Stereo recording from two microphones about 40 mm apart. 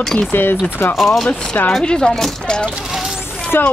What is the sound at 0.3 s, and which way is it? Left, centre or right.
Speech, left.